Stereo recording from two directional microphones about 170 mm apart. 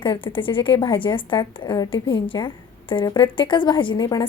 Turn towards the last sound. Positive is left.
turn(degrees=25)  # may be behind; listen again after turning